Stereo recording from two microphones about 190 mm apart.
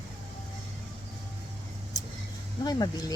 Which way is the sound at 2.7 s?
20° left (ahead or behind).